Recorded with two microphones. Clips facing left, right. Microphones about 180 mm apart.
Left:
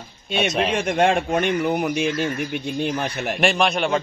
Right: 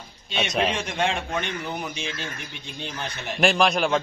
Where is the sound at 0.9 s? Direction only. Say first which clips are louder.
Left 7 dB; 55° left (ahead or behind).